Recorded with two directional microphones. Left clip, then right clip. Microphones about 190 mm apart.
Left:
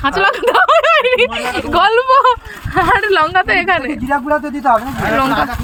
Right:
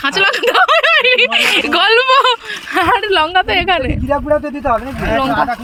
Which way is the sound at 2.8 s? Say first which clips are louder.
Left 1 dB; centre (ahead or behind).